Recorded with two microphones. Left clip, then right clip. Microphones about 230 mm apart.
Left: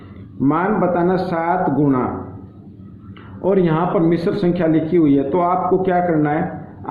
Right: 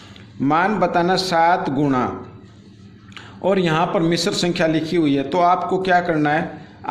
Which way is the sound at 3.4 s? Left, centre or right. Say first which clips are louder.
Left 1 dB; right.